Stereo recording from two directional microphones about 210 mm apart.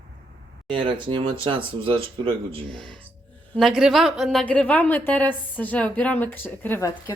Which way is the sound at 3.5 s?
Centre (ahead or behind).